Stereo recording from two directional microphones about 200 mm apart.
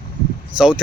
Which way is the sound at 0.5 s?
5° right (ahead or behind).